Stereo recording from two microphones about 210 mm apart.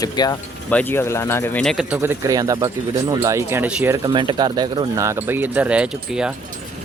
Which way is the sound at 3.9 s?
20° right (ahead or behind).